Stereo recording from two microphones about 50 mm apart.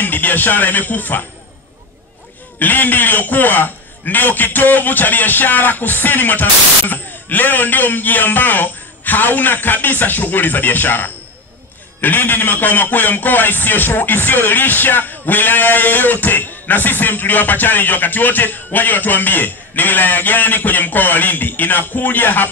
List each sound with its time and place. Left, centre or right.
0.0 s a man's voice: left
2.6 s a man's voice: left